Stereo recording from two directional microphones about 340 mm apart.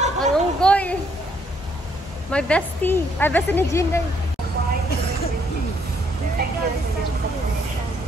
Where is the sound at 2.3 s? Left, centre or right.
Centre.